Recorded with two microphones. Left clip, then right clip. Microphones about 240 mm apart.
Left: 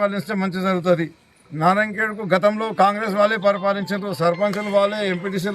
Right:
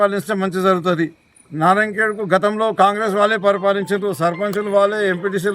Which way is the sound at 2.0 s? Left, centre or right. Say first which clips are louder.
Right 2 dB; centre.